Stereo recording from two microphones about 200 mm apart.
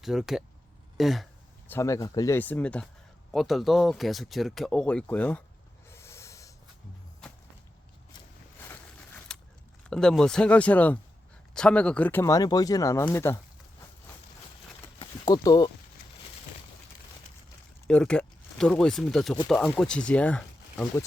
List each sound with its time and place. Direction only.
0.0 s speech: centre (ahead or behind)
5.9 s snort: 15° left (ahead or behind)
8.5 s a sound: 10° left (ahead or behind)
9.9 s speech: 5° left (ahead or behind)
14.9 s clip-clop: 25° left (ahead or behind)
17.8 s speech: 5° left (ahead or behind)